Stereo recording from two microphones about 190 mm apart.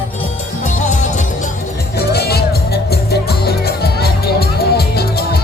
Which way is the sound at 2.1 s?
55° left (ahead or behind).